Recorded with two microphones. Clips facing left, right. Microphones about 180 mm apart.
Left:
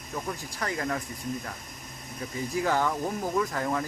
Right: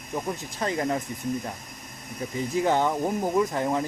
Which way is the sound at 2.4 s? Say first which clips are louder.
Right 3 dB; 20° right (ahead or behind).